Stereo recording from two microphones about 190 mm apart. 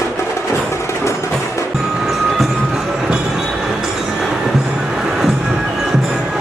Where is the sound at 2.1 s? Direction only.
Centre (ahead or behind).